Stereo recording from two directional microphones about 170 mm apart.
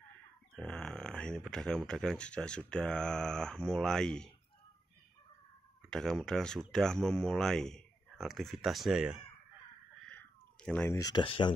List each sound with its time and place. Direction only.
0.6 s speech: 5° left (ahead or behind)
5.9 s speech: 5° left (ahead or behind)
10.0 s cat: 5° left (ahead or behind); by 11.5 s 30° left (ahead or behind)